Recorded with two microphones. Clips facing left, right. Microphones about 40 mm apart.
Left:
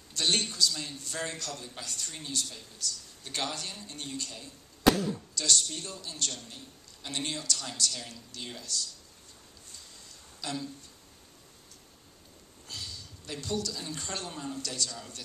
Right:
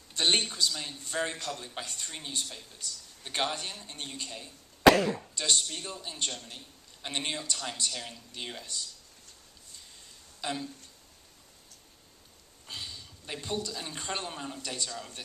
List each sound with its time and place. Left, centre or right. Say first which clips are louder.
0.1 s a man's voice: right 2 dB; right
4.8 s speech: right 5 dB; right
5.3 s a man's voice: even; right
10.4 s a man's voice: right 1 dB; right
12.6 s speech: right 1 dB; right